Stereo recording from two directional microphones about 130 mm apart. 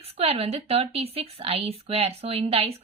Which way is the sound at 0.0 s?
50° right (ahead or behind).